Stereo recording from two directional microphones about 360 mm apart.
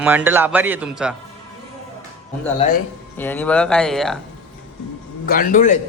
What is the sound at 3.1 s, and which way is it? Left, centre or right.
A man's voice, centre.